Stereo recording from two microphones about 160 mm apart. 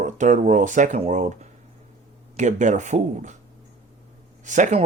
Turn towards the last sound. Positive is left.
turn(degrees=-45)  # may be behind; listen again after turning